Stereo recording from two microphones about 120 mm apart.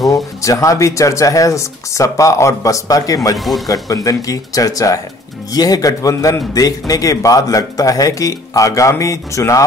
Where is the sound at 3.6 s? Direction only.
30° left (ahead or behind).